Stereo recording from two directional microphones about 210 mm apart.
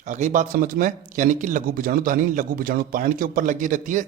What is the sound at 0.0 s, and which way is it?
A man's voice, 35° right (ahead or behind).